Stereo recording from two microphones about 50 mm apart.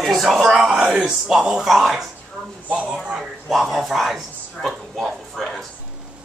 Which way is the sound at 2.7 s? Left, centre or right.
Right.